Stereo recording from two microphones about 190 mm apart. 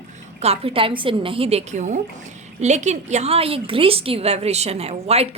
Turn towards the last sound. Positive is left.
turn(degrees=-35)  # may be behind; listen again after turning